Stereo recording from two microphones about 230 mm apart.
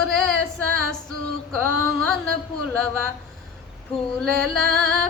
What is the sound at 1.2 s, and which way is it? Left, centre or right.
Female singing, centre.